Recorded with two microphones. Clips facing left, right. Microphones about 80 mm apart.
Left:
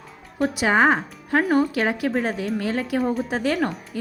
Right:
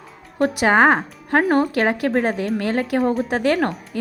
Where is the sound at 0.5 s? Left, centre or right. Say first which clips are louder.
Right 3 dB; right.